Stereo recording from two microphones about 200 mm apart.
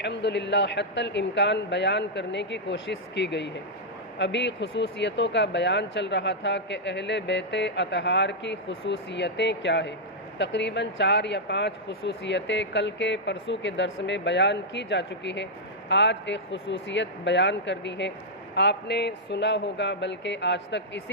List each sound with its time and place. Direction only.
0.0 s speech: 60° left (ahead or behind)